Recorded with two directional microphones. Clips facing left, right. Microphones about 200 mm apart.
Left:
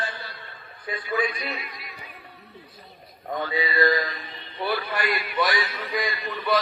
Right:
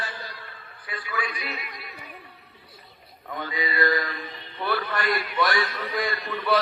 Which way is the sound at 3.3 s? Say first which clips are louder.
Left 3 dB; 30° left (ahead or behind).